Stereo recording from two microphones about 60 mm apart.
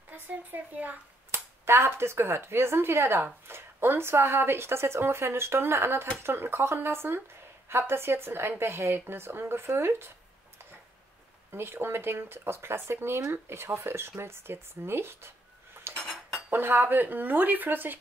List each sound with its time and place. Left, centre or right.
0.1 s speech: right
1.3 s a woman's voice: right
11.5 s a woman's voice: right
16.3 s cutlery: right
16.6 s speech: right